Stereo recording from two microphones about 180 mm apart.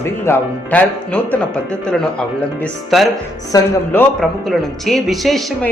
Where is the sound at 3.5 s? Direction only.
20° left (ahead or behind).